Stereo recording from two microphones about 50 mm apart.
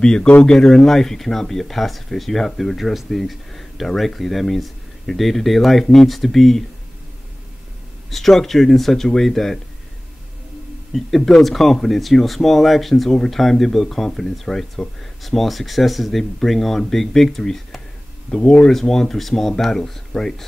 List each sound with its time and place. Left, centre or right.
0.0 s speech: centre
8.1 s speech: centre
10.9 s speech: centre
18.3 s speech: centre
18.7 s speech: centre